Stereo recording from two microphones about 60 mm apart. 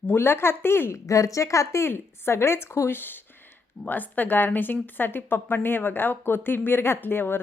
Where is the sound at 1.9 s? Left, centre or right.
Left.